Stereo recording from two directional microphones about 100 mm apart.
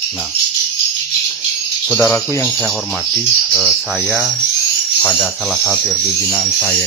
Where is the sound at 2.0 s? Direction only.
25° left (ahead or behind).